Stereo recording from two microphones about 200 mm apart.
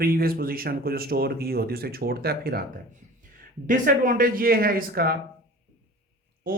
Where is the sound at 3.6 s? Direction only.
40° right (ahead or behind).